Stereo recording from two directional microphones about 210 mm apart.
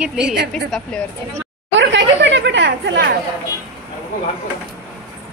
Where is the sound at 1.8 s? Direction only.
60° right (ahead or behind).